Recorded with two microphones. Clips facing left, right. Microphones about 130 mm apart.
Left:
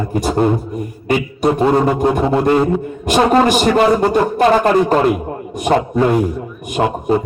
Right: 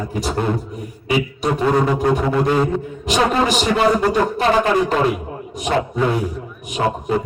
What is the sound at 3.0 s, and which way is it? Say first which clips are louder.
A man's voice: left 5 dB; 50° left (ahead or behind).